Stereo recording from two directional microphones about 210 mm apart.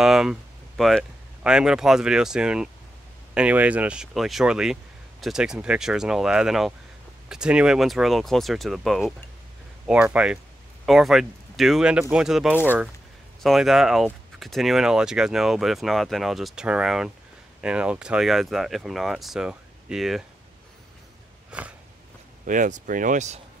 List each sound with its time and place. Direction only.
0.0 s speech: centre (ahead or behind)
21.5 s a sound: 5° right (ahead or behind)
22.4 s speech: 40° right (ahead or behind)